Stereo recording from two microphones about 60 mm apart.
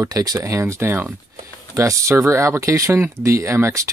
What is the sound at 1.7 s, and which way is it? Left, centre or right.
Speech, right.